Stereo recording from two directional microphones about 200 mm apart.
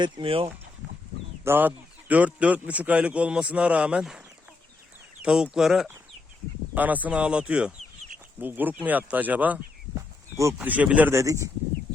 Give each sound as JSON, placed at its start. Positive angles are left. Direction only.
{"t": 0.0, "sound": "speech", "side_deg": -25}
{"t": 1.5, "sound": "speech", "side_deg": -10}
{"t": 5.2, "sound": "speech", "side_deg": -5}